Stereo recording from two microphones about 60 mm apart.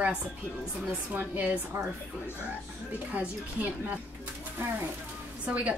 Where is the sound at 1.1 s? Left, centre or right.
Right.